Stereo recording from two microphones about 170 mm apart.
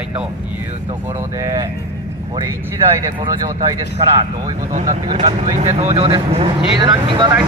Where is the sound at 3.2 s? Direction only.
20° right (ahead or behind).